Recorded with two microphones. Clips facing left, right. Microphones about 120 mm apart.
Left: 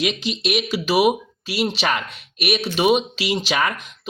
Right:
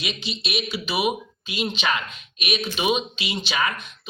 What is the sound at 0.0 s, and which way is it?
Speech, 90° left.